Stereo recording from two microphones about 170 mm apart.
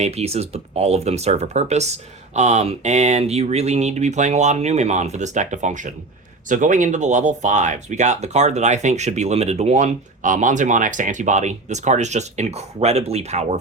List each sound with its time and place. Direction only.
0.0 s speech: 40° right (ahead or behind)